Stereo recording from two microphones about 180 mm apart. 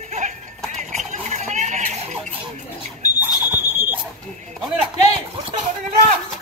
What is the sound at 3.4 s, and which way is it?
Smoke detector, 10° right (ahead or behind).